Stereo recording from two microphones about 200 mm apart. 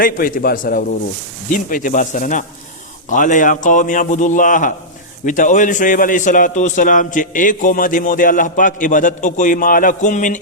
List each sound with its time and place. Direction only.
0.0 s a man's voice: 45° left (ahead or behind)